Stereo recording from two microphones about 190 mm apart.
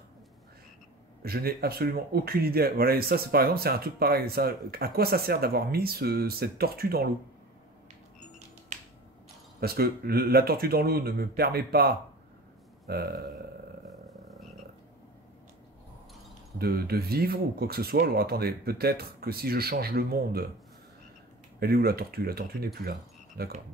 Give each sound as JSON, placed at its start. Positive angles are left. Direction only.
{"t": 1.2, "sound": "speech", "side_deg": -55}
{"t": 9.6, "sound": "speech", "side_deg": -55}
{"t": 12.8, "sound": "burping", "side_deg": -55}
{"t": 16.5, "sound": "speech", "side_deg": -55}
{"t": 21.5, "sound": "speech", "side_deg": -55}